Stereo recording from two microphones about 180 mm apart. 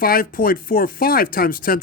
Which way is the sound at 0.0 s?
55° left (ahead or behind).